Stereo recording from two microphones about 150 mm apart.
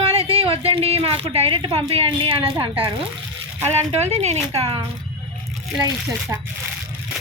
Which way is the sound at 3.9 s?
45° right (ahead or behind).